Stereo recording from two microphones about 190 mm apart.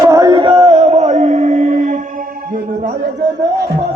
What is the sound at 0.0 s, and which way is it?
Music, 20° right (ahead or behind).